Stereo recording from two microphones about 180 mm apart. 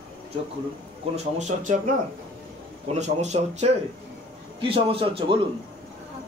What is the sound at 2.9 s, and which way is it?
Speech, 40° right (ahead or behind).